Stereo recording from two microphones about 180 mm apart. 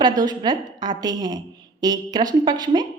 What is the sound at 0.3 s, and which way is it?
A woman's voice, 20° right (ahead or behind).